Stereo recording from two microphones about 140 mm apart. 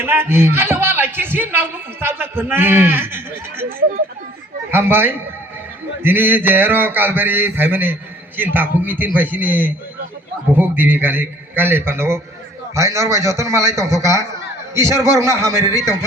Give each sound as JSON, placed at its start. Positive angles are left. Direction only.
{"t": 0.0, "sound": "speech", "side_deg": -15}
{"t": 4.7, "sound": "mantra", "side_deg": -15}
{"t": 12.7, "sound": "a man's voice", "side_deg": -20}